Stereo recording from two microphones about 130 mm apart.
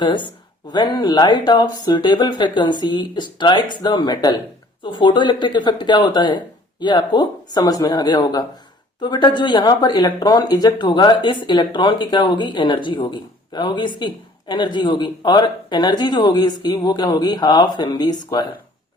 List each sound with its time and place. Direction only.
0.0 s speech: 35° left (ahead or behind)